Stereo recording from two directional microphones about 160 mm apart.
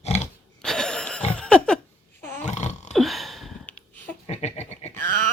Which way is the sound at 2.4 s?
45° left (ahead or behind).